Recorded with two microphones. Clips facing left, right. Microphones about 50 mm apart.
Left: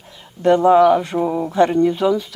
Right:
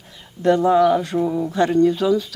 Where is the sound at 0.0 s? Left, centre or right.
Centre.